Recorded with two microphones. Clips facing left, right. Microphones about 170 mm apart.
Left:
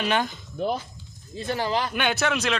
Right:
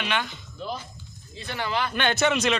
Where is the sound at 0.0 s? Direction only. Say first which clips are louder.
Left 4 dB; 40° left (ahead or behind).